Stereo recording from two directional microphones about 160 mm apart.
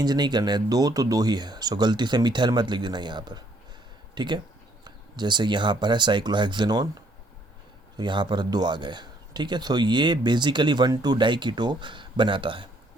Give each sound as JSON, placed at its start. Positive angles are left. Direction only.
{"t": 0.0, "sound": "a man's voice", "side_deg": -25}
{"t": 7.9, "sound": "a man's voice", "side_deg": -30}